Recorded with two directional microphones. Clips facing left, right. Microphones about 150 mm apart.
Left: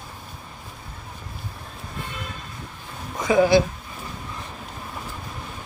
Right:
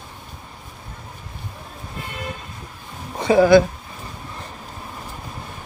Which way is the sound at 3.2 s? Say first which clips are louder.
Right 3 dB; 35° right (ahead or behind).